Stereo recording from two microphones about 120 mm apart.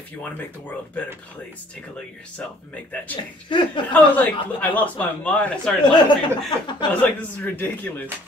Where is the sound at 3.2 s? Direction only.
40° left (ahead or behind).